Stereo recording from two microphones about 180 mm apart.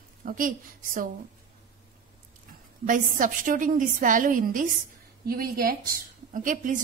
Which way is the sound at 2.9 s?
50° right (ahead or behind).